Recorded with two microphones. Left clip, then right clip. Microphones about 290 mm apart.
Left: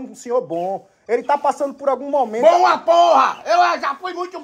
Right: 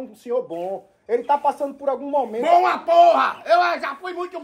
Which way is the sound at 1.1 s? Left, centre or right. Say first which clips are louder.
Left 2 dB; left.